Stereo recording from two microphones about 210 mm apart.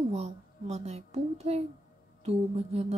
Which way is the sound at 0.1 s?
30° right (ahead or behind).